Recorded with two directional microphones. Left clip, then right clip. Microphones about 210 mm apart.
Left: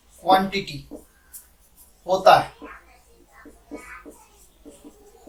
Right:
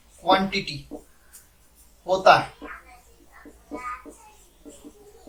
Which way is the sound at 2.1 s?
15° left (ahead or behind).